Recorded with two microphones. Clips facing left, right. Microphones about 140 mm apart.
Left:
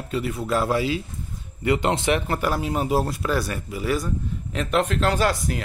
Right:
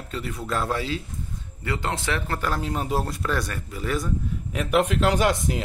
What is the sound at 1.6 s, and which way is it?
Speech, 20° left (ahead or behind).